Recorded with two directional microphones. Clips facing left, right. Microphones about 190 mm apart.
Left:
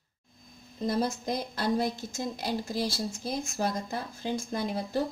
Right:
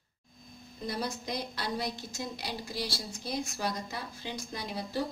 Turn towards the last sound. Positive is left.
turn(degrees=50)  # may be behind; listen again after turning